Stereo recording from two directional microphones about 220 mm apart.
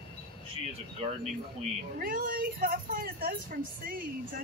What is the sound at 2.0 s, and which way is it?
A woman's voice, 40° right (ahead or behind).